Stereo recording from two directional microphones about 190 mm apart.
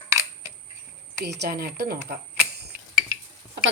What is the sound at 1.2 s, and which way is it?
Speech, 60° right (ahead or behind).